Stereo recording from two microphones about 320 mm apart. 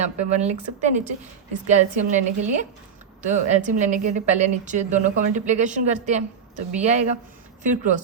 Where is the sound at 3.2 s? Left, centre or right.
Right.